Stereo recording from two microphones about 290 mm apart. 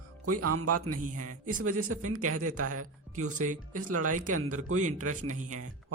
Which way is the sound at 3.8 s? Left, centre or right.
Right.